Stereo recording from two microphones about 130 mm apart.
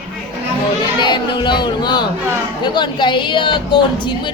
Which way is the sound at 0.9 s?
35° left (ahead or behind).